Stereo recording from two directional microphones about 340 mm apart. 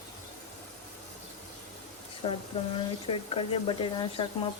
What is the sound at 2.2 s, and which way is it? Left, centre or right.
Speech, centre.